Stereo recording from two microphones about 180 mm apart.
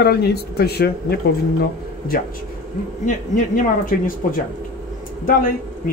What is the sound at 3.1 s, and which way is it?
Speech, 45° left (ahead or behind).